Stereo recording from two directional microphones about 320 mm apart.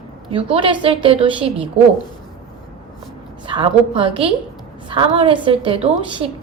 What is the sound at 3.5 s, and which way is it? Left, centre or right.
A woman's voice, centre.